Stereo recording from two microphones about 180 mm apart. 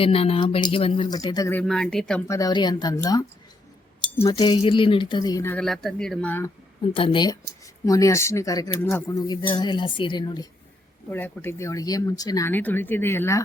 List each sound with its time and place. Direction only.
0.0 s speech: 30° left (ahead or behind)
1.5 s speech: 5° left (ahead or behind)
2.2 s speech: 20° left (ahead or behind)
5.6 s speech: centre (ahead or behind)
6.9 s speech: 30° left (ahead or behind)
11.1 s speech: 10° left (ahead or behind)